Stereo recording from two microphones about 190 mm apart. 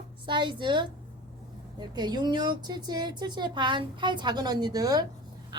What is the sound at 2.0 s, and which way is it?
A woman's voice, 20° right (ahead or behind).